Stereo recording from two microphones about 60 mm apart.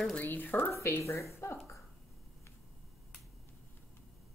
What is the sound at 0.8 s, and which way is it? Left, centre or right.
Speech, left.